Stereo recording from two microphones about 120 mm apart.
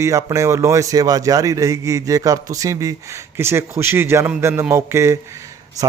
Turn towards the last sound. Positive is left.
turn(degrees=-20)  # may be behind; listen again after turning